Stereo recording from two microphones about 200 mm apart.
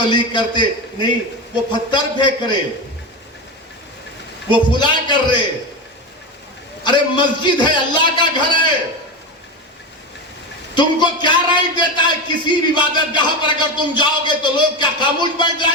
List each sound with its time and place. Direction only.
0.1 s a man's voice: 25° left (ahead or behind)
4.5 s a man's voice: 25° left (ahead or behind)
6.8 s a man's voice: 20° left (ahead or behind)
10.8 s a man's voice: 20° left (ahead or behind)